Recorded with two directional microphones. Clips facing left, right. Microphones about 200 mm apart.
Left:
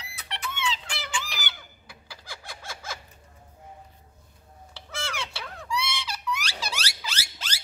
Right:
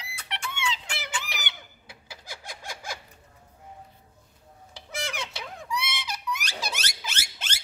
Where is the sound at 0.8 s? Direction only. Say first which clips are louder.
Left 1 dB; 20° right (ahead or behind).